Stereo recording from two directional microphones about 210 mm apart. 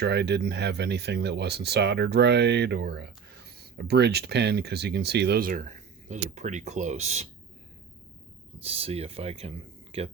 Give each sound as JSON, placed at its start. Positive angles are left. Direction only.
{"t": 0.0, "sound": "speech", "side_deg": -55}
{"t": 8.6, "sound": "speech", "side_deg": -30}